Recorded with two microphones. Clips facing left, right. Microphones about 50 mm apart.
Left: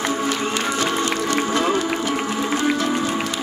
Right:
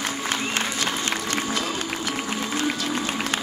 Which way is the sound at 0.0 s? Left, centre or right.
Left.